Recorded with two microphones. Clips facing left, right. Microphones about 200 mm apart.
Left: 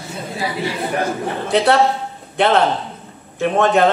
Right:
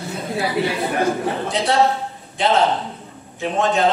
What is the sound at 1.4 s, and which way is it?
A man's voice, 60° left (ahead or behind).